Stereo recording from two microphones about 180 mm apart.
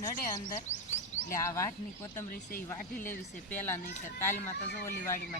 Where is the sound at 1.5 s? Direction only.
15° left (ahead or behind).